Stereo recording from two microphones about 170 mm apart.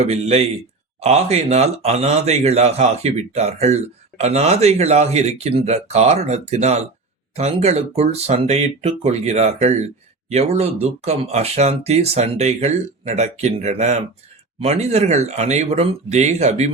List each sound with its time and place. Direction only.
0.0 s speech: 40° right (ahead or behind)